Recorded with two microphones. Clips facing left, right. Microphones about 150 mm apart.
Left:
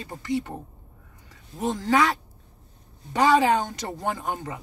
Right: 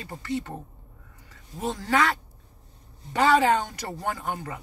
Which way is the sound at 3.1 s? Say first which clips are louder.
Left 1 dB; 15° left (ahead or behind).